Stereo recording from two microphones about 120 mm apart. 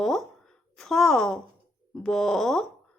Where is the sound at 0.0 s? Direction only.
5° left (ahead or behind).